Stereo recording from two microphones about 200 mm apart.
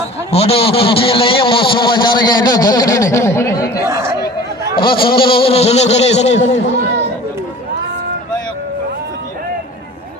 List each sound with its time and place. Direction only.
0.3 s a man's voice: 30° left (ahead or behind); by 3.8 s 15° left (ahead or behind)
3.8 s speech: 15° right (ahead or behind)
4.8 s a man's voice: 25° left (ahead or behind)